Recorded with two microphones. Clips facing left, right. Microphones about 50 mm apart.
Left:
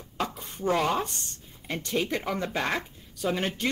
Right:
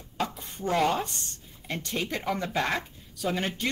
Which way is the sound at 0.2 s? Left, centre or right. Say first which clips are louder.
Left 1 dB; centre.